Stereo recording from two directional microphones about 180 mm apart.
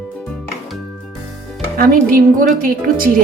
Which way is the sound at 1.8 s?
50° right (ahead or behind).